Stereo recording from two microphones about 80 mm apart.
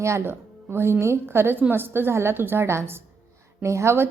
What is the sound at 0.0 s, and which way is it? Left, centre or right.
A woman's voice, right.